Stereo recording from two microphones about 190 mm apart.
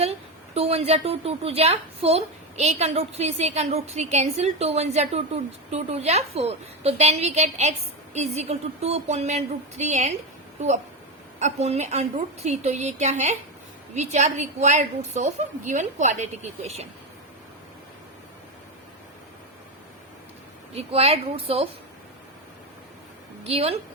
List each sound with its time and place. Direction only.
0.0 s a woman's voice: 35° right (ahead or behind)
11.3 s a woman's voice: 35° right (ahead or behind)
20.9 s a woman's voice: 30° right (ahead or behind)
23.4 s a woman's voice: 30° right (ahead or behind)